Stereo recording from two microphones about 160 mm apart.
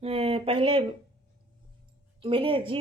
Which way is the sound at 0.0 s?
40° right (ahead or behind).